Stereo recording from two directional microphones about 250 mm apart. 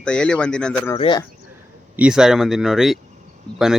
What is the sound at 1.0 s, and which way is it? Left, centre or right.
Speech, centre.